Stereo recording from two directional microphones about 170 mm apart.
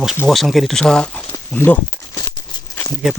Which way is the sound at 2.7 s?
20° left (ahead or behind).